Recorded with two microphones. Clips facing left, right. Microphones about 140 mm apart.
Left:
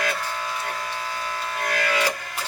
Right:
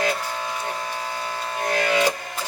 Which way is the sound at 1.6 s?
25° right (ahead or behind).